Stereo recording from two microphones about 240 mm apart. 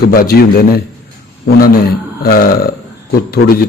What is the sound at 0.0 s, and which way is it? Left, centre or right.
Speech, left.